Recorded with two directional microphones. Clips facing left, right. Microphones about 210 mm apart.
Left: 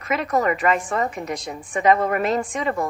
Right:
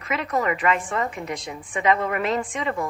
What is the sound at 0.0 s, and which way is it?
A woman's voice, 45° left (ahead or behind).